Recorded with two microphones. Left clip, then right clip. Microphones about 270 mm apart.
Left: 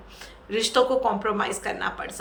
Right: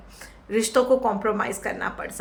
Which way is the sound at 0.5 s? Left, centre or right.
Centre.